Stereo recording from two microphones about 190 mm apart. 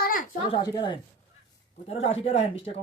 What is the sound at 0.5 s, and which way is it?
Speech, 25° left (ahead or behind).